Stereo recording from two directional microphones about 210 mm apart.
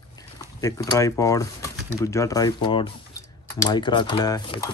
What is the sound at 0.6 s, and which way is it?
Speech, 15° left (ahead or behind).